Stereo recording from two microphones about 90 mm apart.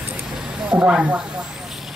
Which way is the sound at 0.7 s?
15° right (ahead or behind).